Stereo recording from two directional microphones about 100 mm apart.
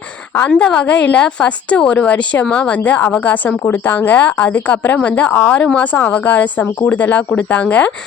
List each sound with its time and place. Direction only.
0.3 s a woman's voice: 10° left (ahead or behind)